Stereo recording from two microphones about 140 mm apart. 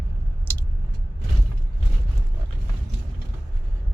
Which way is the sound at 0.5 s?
15° left (ahead or behind).